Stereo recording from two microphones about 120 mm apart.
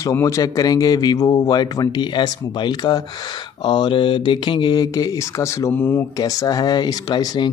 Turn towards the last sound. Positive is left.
turn(degrees=35)  # may be behind; listen again after turning